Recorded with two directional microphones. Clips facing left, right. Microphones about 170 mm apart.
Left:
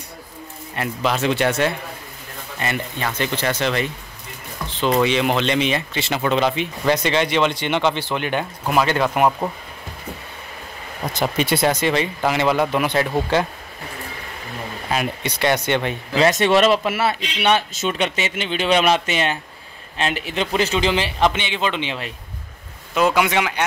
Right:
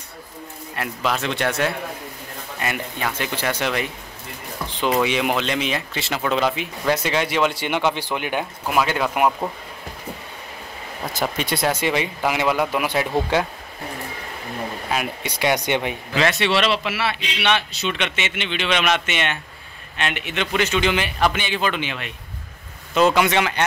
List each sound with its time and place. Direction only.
0.7 s speech: centre (ahead or behind)
11.1 s speech: centre (ahead or behind)
11.8 s speech: 10° right (ahead or behind)
14.9 s speech: 5° right (ahead or behind)
16.1 s a man's voice: 35° left (ahead or behind)
22.9 s speech: 10° left (ahead or behind)